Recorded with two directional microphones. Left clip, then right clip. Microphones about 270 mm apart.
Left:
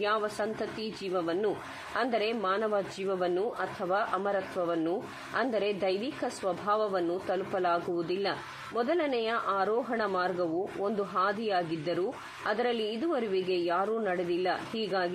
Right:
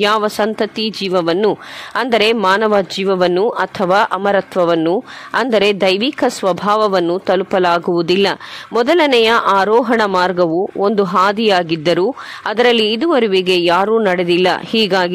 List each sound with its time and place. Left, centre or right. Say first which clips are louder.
0.0 s speech: right 16 dB; right